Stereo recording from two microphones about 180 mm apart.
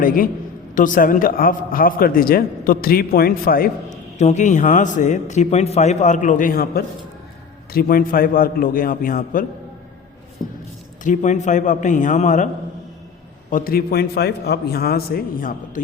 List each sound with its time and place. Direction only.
0.0 s a man's voice: 50° left (ahead or behind)
4.2 s a man's voice: 40° left (ahead or behind)
11.0 s a man's voice: 45° left (ahead or behind)
13.5 s a man's voice: 55° left (ahead or behind)